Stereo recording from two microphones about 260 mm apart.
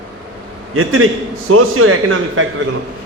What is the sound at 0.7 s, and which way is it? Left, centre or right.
A man's voice, right.